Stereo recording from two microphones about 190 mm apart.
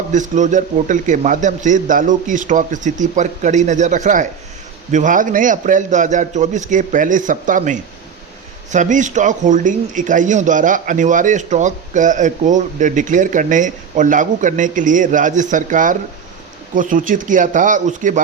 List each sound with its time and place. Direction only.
0.1 s a man's voice: 40° right (ahead or behind)